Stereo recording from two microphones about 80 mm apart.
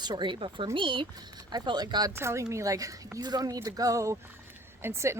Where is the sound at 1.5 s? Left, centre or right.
Right.